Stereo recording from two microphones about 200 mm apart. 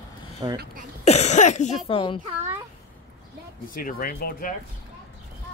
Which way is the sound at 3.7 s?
45° left (ahead or behind).